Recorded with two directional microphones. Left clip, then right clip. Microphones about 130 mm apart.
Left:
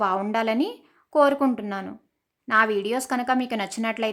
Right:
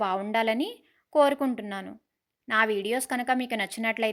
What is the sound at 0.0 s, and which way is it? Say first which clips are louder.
A woman's voice: left 3 dB; 15° right (ahead or behind).